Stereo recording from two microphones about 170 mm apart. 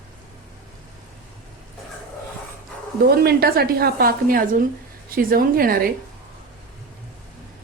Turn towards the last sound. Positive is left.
turn(degrees=-60)  # may be behind; listen again after turning